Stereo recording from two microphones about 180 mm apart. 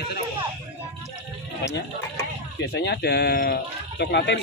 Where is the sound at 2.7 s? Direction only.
65° left (ahead or behind).